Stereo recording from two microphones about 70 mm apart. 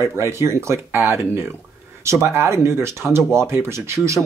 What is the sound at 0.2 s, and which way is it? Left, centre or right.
Speech, right.